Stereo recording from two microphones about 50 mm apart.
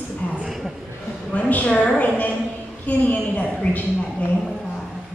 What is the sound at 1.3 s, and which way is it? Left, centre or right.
A man's voice, left.